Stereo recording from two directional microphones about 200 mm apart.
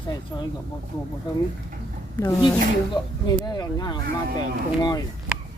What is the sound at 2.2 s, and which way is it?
Speech, 20° left (ahead or behind).